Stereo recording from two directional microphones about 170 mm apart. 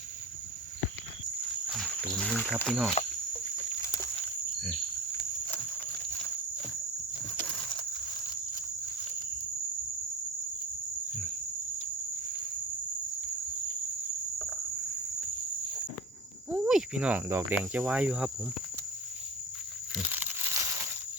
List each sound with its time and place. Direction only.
1.6 s speech: centre (ahead or behind)
14.3 s cricket: 5° left (ahead or behind)
16.5 s speech: 5° right (ahead or behind)
20.0 s a sound: 10° right (ahead or behind)